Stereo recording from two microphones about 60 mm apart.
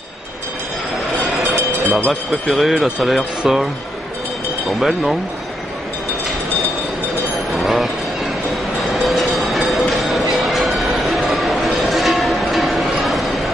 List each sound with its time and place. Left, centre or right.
1.5 s music: left
2.4 s speech: centre
4.6 s speech: centre
7.3 s chink: centre
8.5 s train: centre
10.3 s a sound: centre